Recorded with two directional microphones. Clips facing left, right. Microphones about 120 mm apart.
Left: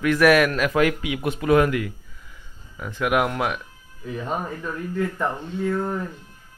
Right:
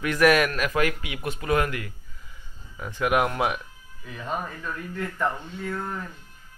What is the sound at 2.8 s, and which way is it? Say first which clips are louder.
Speech: left 1 dB; centre (ahead or behind).